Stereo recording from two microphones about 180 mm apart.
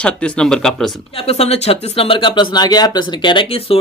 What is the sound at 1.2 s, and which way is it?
Speech, 35° left (ahead or behind).